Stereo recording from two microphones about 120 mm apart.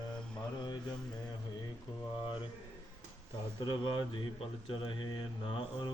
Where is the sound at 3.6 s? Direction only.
40° left (ahead or behind).